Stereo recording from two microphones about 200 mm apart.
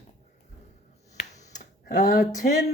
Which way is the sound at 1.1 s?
35° left (ahead or behind).